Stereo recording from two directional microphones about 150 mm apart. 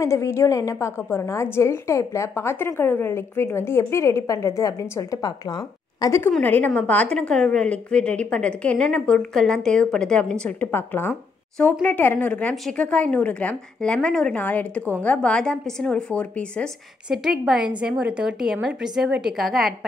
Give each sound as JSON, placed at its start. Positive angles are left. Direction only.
{"t": 0.0, "sound": "a woman's voice", "side_deg": 20}
{"t": 17.1, "sound": "a woman's voice", "side_deg": -5}